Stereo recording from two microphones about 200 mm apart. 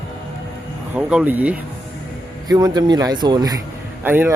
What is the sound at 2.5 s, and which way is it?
Speech, 20° right (ahead or behind).